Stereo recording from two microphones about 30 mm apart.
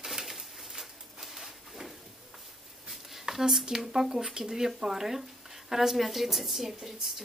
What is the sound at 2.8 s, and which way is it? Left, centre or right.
A woman's voice, centre.